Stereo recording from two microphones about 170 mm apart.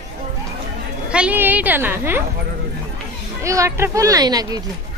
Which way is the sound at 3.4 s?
15° right (ahead or behind).